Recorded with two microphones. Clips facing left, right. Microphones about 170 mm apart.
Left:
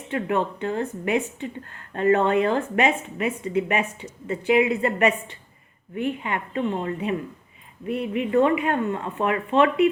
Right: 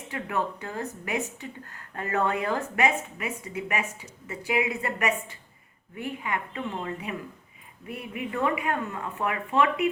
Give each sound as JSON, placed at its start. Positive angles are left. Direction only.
{"t": 0.1, "sound": "speech", "side_deg": 25}